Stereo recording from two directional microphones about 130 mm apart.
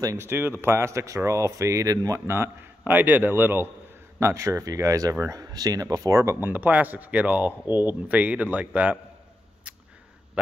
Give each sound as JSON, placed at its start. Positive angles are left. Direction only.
{"t": 0.0, "sound": "speech", "side_deg": -20}